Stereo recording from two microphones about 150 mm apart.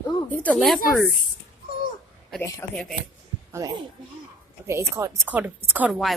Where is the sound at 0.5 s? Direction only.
Centre (ahead or behind).